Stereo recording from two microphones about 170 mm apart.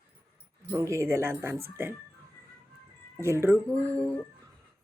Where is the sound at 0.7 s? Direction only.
15° right (ahead or behind).